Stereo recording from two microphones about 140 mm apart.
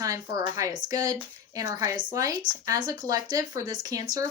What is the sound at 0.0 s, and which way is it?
Speech, 25° right (ahead or behind).